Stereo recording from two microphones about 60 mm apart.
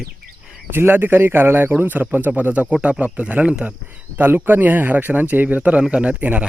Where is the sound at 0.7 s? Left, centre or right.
Right; by 3.7 s centre.